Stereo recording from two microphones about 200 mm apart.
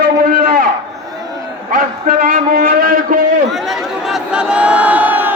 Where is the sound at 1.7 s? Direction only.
45° right (ahead or behind).